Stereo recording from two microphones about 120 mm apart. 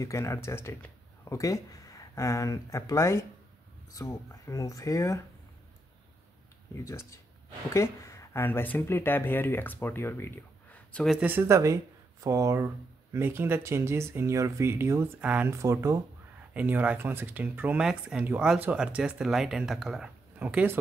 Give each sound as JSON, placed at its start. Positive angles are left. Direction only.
{"t": 0.0, "sound": "speech", "side_deg": 25}
{"t": 6.8, "sound": "speech", "side_deg": 25}
{"t": 11.1, "sound": "speech", "side_deg": -10}
{"t": 15.1, "sound": "speech", "side_deg": -10}
{"t": 15.5, "sound": "speech", "side_deg": -25}
{"t": 16.5, "sound": "speech", "side_deg": -15}
{"t": 20.3, "sound": "speech", "side_deg": -15}